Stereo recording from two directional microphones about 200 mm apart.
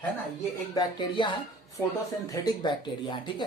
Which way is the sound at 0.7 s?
20° left (ahead or behind).